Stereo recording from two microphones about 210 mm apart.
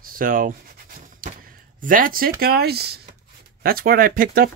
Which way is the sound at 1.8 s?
40° right (ahead or behind).